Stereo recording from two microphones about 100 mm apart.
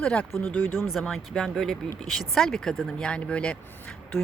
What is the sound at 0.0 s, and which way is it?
Speech, 10° left (ahead or behind).